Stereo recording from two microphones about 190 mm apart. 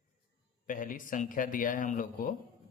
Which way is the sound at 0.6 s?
45° left (ahead or behind).